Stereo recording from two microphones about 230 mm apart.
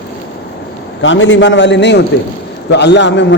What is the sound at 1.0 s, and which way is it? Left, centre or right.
A man's voice, left.